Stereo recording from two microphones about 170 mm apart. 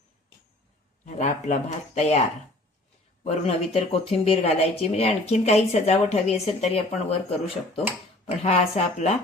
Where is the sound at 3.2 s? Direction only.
35° left (ahead or behind).